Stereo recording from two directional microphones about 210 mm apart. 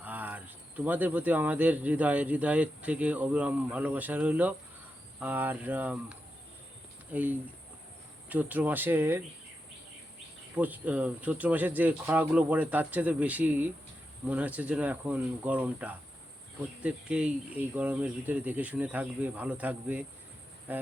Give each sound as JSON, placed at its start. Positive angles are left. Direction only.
{"t": 0.0, "sound": "speech", "side_deg": -10}
{"t": 10.5, "sound": "speech", "side_deg": -5}